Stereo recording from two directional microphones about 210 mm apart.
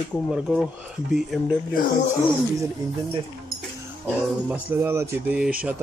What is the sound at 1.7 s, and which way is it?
Speech, 40° left (ahead or behind).